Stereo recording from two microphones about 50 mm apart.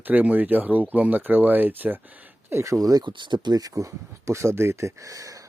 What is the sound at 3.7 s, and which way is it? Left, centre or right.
Speech, right.